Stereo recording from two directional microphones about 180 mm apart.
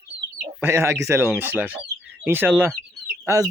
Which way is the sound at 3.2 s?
20° right (ahead or behind).